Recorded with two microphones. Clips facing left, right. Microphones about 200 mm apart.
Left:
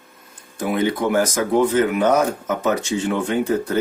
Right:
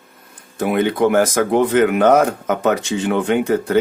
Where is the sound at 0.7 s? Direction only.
60° right (ahead or behind).